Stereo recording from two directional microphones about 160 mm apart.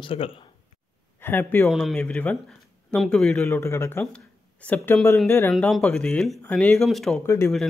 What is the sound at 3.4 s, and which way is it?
Speech, 15° left (ahead or behind).